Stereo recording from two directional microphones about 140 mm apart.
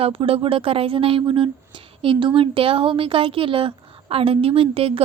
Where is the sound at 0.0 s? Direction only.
40° right (ahead or behind).